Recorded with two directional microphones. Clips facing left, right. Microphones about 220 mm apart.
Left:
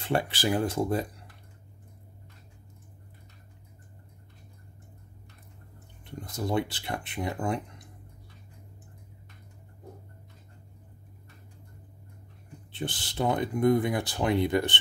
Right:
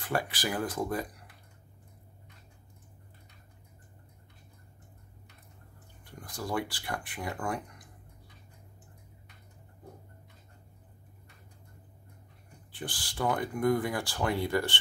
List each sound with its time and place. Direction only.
0.0 s speech: 25° left (ahead or behind)
6.0 s speech: 25° left (ahead or behind)
12.7 s speech: 25° left (ahead or behind)